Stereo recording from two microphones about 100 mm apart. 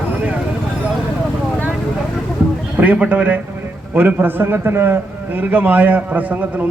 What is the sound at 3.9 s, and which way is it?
A man's voice, 20° right (ahead or behind).